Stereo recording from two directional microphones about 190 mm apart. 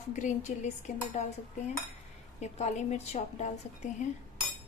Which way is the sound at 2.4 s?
35° left (ahead or behind).